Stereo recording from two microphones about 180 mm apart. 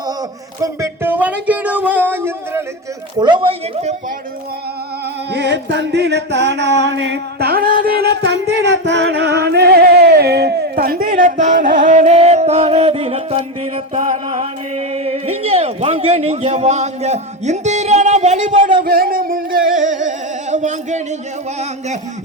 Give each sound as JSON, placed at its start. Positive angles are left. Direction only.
{"t": 0.6, "sound": "a sound", "side_deg": -15}
{"t": 3.2, "sound": "a woman's voice", "side_deg": -25}
{"t": 5.3, "sound": "music", "side_deg": -70}
{"t": 18.8, "sound": "singing", "side_deg": -55}